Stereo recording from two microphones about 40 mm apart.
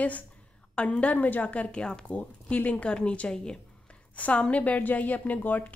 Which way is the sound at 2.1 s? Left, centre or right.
Left.